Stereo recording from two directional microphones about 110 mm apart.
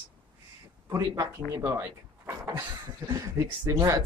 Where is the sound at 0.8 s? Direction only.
30° right (ahead or behind).